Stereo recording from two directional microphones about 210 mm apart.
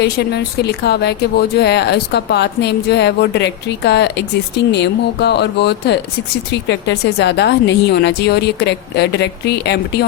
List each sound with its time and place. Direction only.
0.0 s speech: 50° left (ahead or behind)